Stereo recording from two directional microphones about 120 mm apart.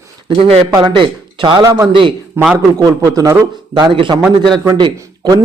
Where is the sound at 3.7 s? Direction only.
45° right (ahead or behind).